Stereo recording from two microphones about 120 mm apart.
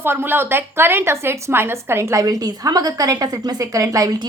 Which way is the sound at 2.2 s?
30° right (ahead or behind).